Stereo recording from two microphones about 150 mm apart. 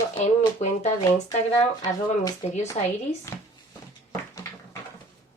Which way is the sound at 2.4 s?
45° left (ahead or behind).